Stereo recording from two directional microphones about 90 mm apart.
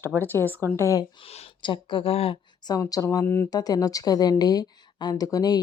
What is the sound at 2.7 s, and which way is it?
Speech, 40° left (ahead or behind).